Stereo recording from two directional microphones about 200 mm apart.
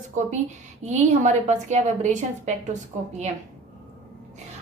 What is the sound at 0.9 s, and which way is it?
A woman's voice, 35° right (ahead or behind).